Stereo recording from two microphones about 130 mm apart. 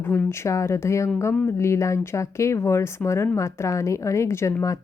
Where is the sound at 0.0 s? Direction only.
20° left (ahead or behind).